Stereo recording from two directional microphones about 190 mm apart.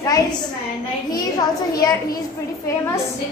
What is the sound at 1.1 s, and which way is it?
Speech, 20° left (ahead or behind).